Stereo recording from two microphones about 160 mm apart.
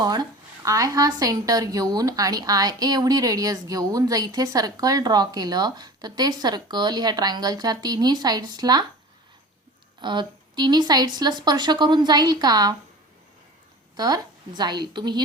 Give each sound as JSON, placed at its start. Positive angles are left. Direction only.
{"t": 0.0, "sound": "a woman's voice", "side_deg": -25}
{"t": 10.0, "sound": "a woman's voice", "side_deg": -30}
{"t": 13.9, "sound": "a woman's voice", "side_deg": -25}